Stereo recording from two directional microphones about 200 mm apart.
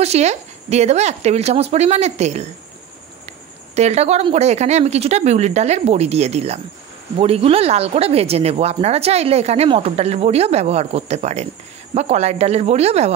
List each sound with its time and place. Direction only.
0.0 s speech: 35° right (ahead or behind)